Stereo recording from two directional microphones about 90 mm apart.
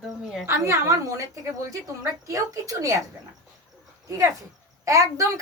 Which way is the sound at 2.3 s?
35° right (ahead or behind).